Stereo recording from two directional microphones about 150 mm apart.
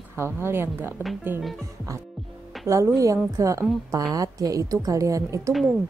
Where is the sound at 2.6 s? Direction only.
20° right (ahead or behind).